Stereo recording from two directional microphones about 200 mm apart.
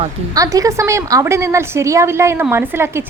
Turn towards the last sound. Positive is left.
turn(degrees=-10)  # may be behind; listen again after turning